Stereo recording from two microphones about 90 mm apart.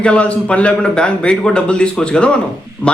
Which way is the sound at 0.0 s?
10° left (ahead or behind).